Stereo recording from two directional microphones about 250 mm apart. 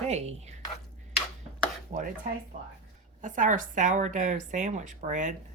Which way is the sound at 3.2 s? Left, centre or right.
Right.